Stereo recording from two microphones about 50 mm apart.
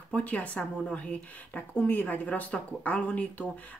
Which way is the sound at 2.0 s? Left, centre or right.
Left.